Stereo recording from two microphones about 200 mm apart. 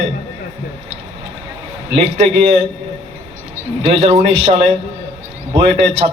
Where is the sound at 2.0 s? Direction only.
30° right (ahead or behind).